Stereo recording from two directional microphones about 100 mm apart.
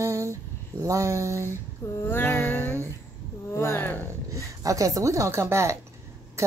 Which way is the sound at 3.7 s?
20° left (ahead or behind).